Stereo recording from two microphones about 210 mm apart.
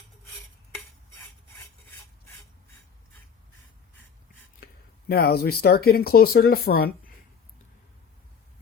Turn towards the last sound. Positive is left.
turn(degrees=45)  # may be behind; listen again after turning